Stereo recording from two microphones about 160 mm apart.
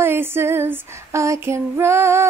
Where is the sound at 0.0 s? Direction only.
15° right (ahead or behind).